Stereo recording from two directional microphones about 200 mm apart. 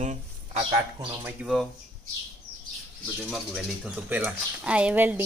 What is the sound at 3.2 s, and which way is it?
Speech, centre (ahead or behind).